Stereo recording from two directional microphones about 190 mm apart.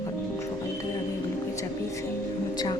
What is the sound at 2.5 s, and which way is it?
Speech, 20° left (ahead or behind).